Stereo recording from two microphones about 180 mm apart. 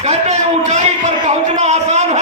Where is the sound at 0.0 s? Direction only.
40° right (ahead or behind).